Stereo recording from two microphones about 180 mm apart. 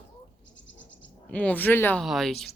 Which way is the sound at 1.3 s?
5° left (ahead or behind).